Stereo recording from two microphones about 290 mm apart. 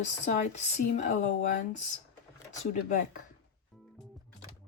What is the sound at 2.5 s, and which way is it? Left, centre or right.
Speech, left.